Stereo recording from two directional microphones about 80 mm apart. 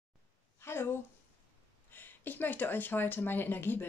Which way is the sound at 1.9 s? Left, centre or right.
Left.